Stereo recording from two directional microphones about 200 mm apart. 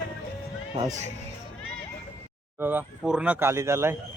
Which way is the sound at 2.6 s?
5° right (ahead or behind).